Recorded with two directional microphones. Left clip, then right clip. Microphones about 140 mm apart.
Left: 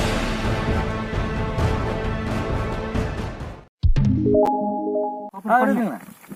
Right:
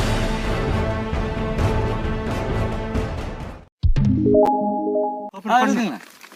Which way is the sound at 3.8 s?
Centre (ahead or behind).